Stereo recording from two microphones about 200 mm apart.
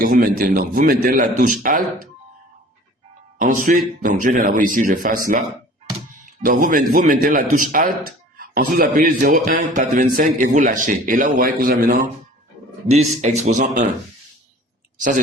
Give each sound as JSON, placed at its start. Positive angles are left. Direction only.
{"t": 0.0, "sound": "speech", "side_deg": -45}
{"t": 3.3, "sound": "a man's voice", "side_deg": -40}
{"t": 12.9, "sound": "a man's voice", "side_deg": -35}